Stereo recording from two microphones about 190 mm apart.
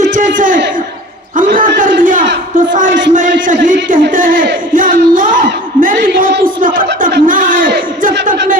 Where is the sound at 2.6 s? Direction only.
45° right (ahead or behind).